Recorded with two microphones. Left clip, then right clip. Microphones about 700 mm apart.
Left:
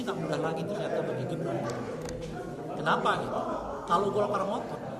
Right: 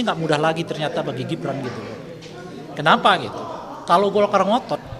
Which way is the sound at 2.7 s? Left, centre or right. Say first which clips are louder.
Right 12 dB; right.